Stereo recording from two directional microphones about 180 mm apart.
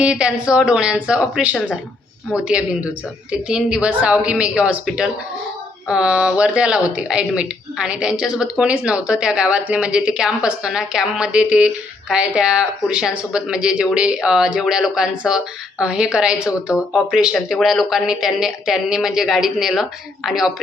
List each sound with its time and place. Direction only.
0.0 s speech: 5° right (ahead or behind)